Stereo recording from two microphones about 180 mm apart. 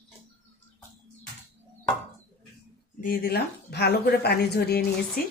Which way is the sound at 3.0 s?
55° left (ahead or behind).